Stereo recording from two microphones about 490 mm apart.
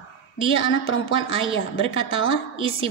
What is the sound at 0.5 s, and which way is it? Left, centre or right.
Speech, left.